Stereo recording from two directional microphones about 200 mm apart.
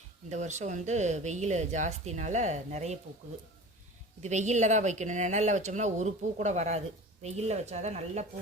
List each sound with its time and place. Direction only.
0.3 s speech: 35° right (ahead or behind)
4.2 s speech: 35° right (ahead or behind)